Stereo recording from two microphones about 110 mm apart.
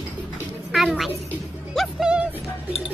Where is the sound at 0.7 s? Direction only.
Centre (ahead or behind).